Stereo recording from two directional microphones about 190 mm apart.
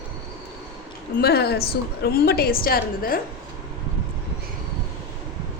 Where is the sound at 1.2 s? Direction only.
55° left (ahead or behind).